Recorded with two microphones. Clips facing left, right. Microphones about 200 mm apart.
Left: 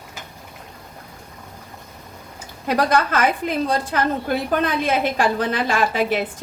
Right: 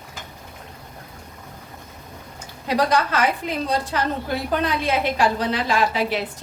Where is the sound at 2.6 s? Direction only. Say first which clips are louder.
Left 1 dB; 50° left (ahead or behind).